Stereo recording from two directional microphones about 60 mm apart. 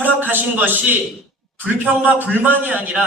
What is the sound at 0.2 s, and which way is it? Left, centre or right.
A man's voice, right.